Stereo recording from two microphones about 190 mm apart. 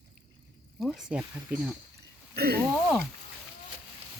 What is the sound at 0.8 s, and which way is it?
Speech, centre (ahead or behind).